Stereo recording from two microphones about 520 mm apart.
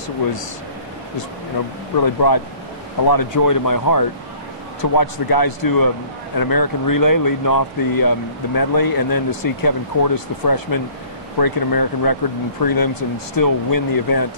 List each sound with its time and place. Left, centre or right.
2.0 s speech: left